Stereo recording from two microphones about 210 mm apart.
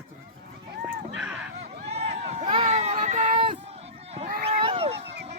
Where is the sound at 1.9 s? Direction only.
30° right (ahead or behind).